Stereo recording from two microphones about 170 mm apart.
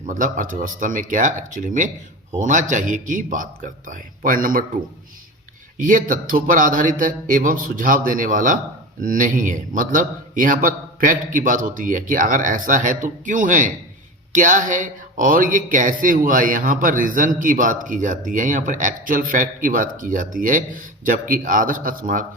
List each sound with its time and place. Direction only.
0.0 s a man's voice: 50° right (ahead or behind)
5.8 s a man's voice: 50° right (ahead or behind)